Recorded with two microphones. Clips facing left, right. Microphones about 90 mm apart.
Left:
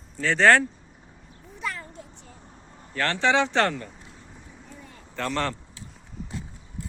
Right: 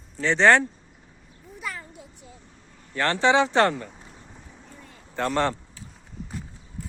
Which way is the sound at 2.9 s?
20° right (ahead or behind).